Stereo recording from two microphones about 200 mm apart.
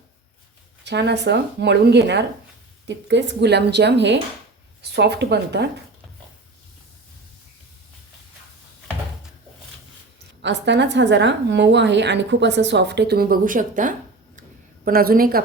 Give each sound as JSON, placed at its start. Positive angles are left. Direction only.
{"t": 0.9, "sound": "a woman's voice", "side_deg": -60}
{"t": 10.4, "sound": "a woman's voice", "side_deg": -60}